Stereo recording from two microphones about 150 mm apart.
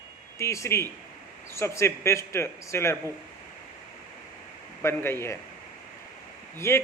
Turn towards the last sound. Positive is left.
turn(degrees=15)  # may be behind; listen again after turning